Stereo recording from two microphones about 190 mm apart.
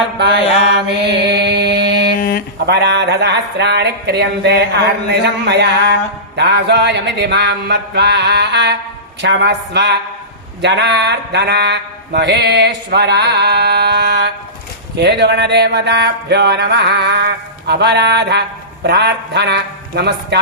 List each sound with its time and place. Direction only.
0.7 s mantra: 60° right (ahead or behind)
1.4 s chant: 60° right (ahead or behind)
2.1 s a sound: 50° left (ahead or behind)
2.6 s mantra: 65° right (ahead or behind)